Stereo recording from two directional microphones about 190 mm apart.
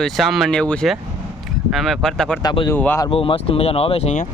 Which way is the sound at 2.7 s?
10° left (ahead or behind).